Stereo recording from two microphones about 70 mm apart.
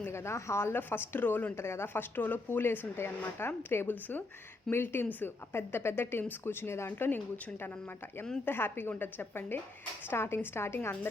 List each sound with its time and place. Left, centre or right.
0.0 s speech: left
8.4 s speech: left